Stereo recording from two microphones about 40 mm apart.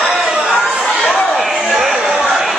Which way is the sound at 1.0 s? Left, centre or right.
Centre.